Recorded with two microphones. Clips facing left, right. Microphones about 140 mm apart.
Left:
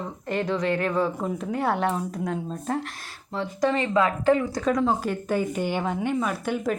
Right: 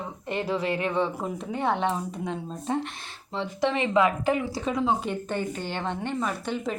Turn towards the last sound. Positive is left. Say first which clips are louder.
# left 3 dB
turn(degrees=5)  # may be behind; listen again after turning